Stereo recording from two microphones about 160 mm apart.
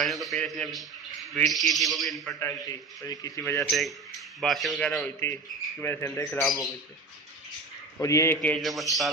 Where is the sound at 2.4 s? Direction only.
20° left (ahead or behind).